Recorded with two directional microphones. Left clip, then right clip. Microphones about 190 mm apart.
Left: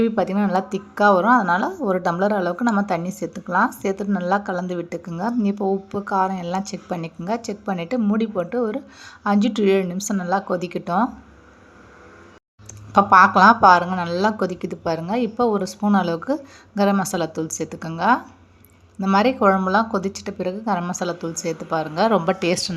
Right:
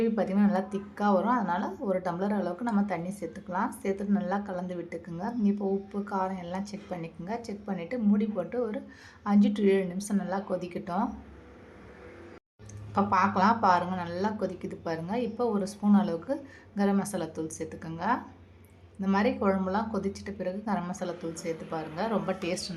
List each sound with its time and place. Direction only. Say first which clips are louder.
0.0 s a woman's voice: left 7 dB; 25° left (ahead or behind)
12.9 s a woman's voice: left 13 dB; 25° left (ahead or behind)